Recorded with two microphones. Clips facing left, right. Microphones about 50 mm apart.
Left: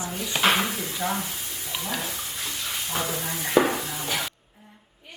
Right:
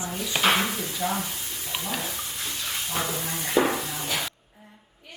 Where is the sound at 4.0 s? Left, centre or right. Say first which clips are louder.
Left 1 dB; centre.